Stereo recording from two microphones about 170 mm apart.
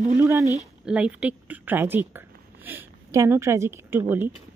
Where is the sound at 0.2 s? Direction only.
15° right (ahead or behind).